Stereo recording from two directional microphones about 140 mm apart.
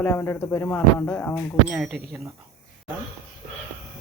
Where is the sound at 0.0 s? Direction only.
15° left (ahead or behind).